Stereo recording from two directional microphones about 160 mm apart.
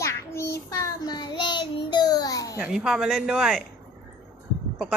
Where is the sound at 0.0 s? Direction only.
15° left (ahead or behind).